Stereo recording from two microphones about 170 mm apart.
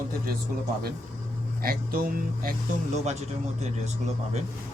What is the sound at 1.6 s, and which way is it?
Speech, 60° right (ahead or behind).